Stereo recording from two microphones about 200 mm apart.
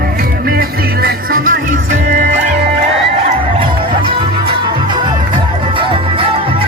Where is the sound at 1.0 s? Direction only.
45° right (ahead or behind).